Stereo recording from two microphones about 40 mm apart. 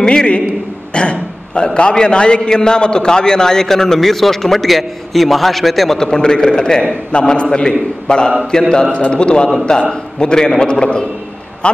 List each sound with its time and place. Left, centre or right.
0.0 s a man's voice: left; by 5.9 s centre
5.9 s a man's voice: centre